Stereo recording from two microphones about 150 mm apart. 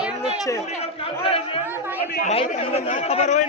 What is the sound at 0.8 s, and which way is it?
Speech, 40° left (ahead or behind).